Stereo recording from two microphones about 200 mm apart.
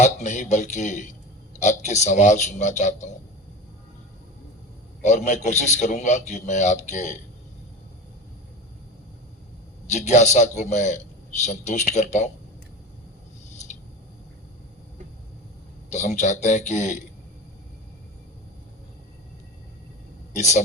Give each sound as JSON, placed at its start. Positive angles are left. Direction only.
{"t": 0.0, "sound": "a man's voice", "side_deg": 35}
{"t": 5.0, "sound": "a man's voice", "side_deg": 35}
{"t": 10.1, "sound": "a man's voice", "side_deg": 35}
{"t": 15.9, "sound": "a man's voice", "side_deg": 35}
{"t": 20.3, "sound": "speech", "side_deg": 35}